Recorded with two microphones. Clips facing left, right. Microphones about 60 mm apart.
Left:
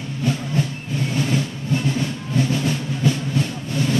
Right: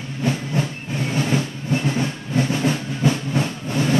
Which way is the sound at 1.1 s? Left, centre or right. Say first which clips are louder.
Right 1 dB; right.